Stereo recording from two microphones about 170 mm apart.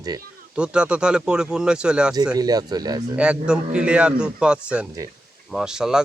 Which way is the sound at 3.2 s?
5° right (ahead or behind).